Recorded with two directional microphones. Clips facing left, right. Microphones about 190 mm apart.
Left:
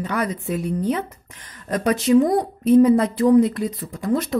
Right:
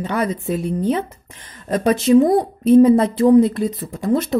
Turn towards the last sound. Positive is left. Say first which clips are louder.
# right 3 dB
turn(degrees=-25)  # may be behind; listen again after turning